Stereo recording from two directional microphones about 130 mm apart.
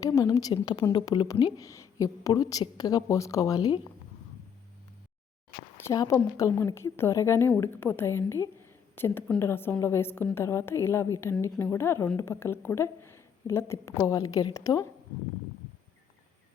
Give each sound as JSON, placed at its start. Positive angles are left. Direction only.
{"t": 0.0, "sound": "a woman's voice", "side_deg": 25}
{"t": 5.7, "sound": "a sound", "side_deg": 20}
{"t": 6.0, "sound": "a woman's voice", "side_deg": 25}